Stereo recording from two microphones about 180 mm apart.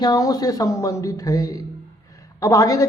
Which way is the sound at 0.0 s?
20° left (ahead or behind).